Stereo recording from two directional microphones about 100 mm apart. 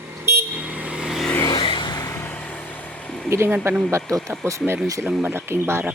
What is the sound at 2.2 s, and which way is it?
Vehicle, 15° left (ahead or behind).